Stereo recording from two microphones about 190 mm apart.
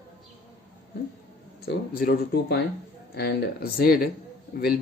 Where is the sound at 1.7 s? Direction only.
55° left (ahead or behind).